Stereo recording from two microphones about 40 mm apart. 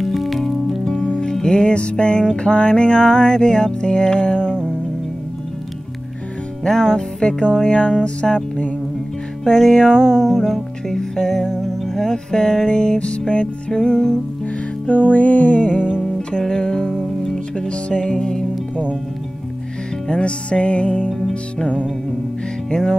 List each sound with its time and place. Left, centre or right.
0.0 s music: centre
0.8 s music: left
4.4 s music: right
7.0 s music: left
8.2 s music: centre
9.8 s music: centre
14.4 s music: left
15.7 s music: right
16.2 s music: left
16.4 s music: centre
17.6 s music: left
18.0 s music: centre
20.1 s music: left
22.7 s music: centre